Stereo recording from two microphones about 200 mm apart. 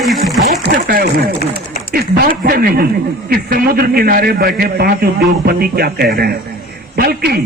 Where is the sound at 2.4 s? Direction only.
50° right (ahead or behind).